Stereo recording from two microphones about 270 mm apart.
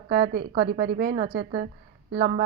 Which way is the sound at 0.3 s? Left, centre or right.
Right.